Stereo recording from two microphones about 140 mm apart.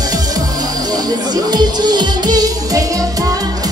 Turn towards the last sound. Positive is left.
turn(degrees=-25)  # may be behind; listen again after turning